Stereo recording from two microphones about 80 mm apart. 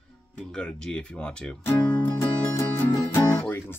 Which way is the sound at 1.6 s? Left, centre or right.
Left.